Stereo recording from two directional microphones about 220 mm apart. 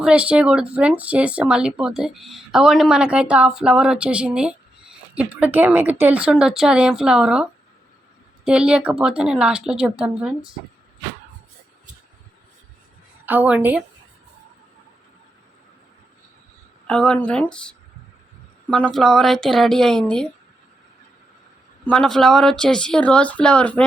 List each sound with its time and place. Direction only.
0.0 s speech: 5° right (ahead or behind)
8.4 s speech: 5° right (ahead or behind)
13.2 s a woman's voice: 10° right (ahead or behind)
16.8 s speech: 5° left (ahead or behind)
21.8 s speech: 5° left (ahead or behind)